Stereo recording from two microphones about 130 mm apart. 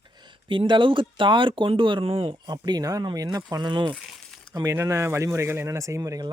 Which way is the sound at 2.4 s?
30° right (ahead or behind).